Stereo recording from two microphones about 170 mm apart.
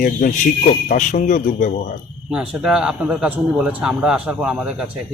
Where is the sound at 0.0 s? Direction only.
55° left (ahead or behind).